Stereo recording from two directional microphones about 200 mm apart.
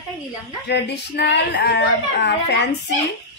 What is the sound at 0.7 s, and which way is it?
Speech, 55° left (ahead or behind).